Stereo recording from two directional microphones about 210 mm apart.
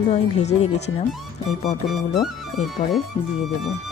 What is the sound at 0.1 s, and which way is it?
Speech, 30° left (ahead or behind).